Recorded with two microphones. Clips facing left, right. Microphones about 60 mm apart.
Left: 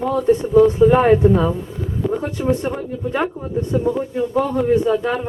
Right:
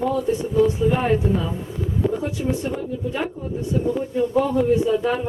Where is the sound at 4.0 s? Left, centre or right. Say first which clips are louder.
Left 1 dB; left.